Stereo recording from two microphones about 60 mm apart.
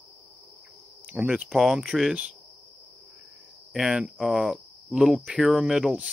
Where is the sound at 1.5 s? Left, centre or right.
Centre.